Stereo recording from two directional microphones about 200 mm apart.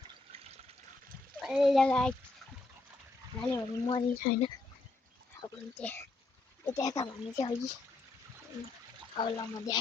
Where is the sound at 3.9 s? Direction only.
30° left (ahead or behind).